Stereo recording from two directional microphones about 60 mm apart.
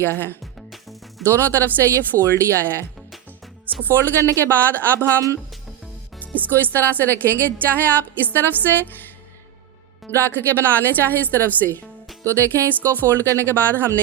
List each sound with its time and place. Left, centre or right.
0.0 s a woman's voice: left
3.8 s a woman's voice: left
6.7 s a woman's voice: left
10.1 s a woman's voice: left